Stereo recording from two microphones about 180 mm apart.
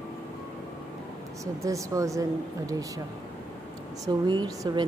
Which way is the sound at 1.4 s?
15° right (ahead or behind).